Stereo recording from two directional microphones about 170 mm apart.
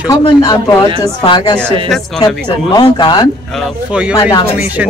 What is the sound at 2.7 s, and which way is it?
Speech, 25° left (ahead or behind).